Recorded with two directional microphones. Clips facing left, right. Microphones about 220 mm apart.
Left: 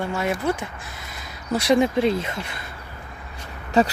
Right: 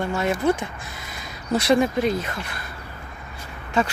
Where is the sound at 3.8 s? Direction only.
35° left (ahead or behind).